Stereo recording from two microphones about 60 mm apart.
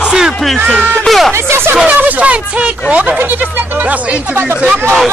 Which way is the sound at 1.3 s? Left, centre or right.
Right.